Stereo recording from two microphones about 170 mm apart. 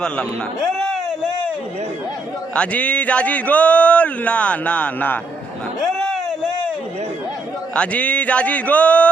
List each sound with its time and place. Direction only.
2.6 s speech: 5° left (ahead or behind)
7.8 s speech: 5° left (ahead or behind)